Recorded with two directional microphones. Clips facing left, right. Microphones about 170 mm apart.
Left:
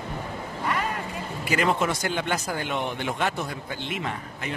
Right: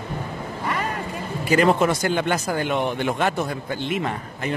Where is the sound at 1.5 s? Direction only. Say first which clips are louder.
Right 6 dB; 40° right (ahead or behind).